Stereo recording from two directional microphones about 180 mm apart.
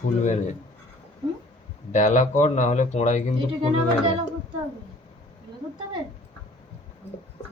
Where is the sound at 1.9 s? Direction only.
45° left (ahead or behind).